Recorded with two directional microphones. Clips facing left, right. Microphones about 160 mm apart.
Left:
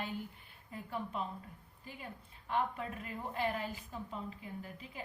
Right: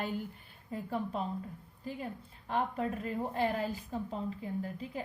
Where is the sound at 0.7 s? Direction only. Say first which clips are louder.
Right 6 dB; 35° right (ahead or behind).